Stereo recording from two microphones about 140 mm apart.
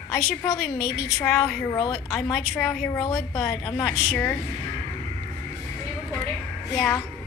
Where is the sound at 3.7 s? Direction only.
10° left (ahead or behind).